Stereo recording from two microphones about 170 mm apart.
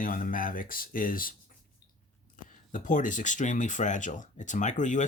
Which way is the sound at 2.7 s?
50° left (ahead or behind).